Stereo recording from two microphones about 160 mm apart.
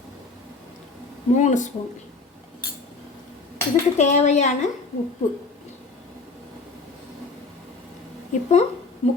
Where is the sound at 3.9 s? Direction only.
45° left (ahead or behind).